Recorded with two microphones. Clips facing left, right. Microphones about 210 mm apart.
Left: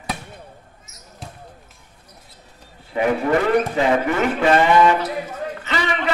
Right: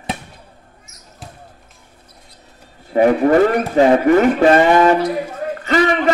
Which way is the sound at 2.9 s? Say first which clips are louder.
Right 8 dB; 45° right (ahead or behind).